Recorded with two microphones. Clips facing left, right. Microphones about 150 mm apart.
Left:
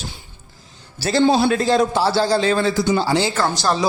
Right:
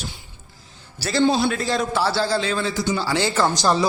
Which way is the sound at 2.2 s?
40° left (ahead or behind).